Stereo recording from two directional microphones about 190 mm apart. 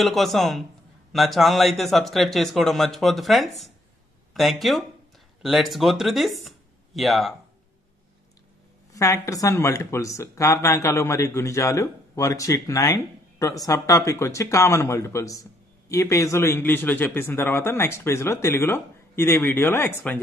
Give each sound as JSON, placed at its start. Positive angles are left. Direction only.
{"t": 0.0, "sound": "speech", "side_deg": 0}
{"t": 8.9, "sound": "speech", "side_deg": 15}